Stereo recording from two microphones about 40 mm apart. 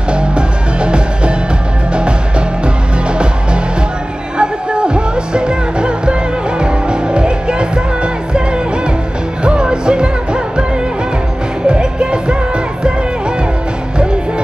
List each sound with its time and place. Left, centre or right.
0.1 s music: right
11.6 s music: right